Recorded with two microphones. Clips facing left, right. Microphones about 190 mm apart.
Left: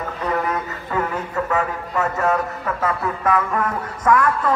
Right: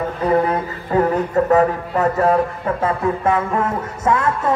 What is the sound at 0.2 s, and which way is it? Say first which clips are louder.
Speech: right 6 dB; 30° right (ahead or behind).